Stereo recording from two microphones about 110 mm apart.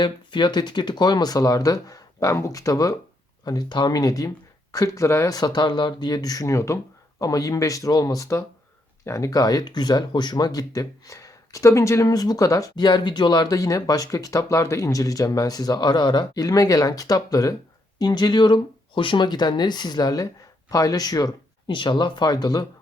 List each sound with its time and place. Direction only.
0.0 s speech: 45° left (ahead or behind)